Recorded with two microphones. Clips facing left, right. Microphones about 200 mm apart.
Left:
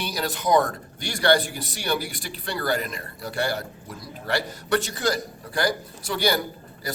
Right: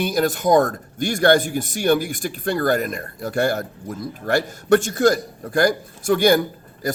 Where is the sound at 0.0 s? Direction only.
50° right (ahead or behind).